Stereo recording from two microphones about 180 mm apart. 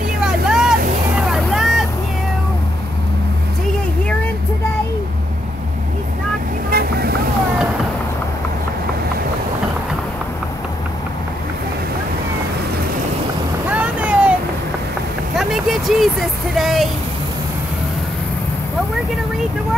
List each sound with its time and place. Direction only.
0.2 s vehicle: centre (ahead or behind)
6.7 s vehicle: 60° right (ahead or behind)
13.7 s boat: 10° right (ahead or behind)
15.3 s a sound: centre (ahead or behind)